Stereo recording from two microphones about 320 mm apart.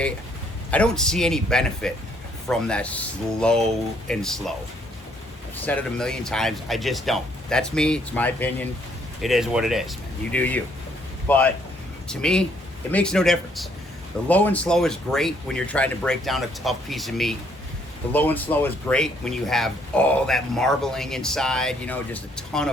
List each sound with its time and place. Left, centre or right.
0.7 s speech: centre
5.6 s speech: centre